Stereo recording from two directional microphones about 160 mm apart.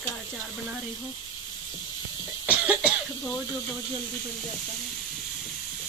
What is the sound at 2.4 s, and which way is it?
Cough, 10° right (ahead or behind).